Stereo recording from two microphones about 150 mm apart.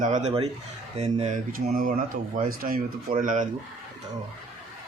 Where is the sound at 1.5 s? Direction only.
70° right (ahead or behind).